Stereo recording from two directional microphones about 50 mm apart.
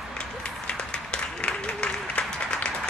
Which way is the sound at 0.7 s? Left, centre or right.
Centre.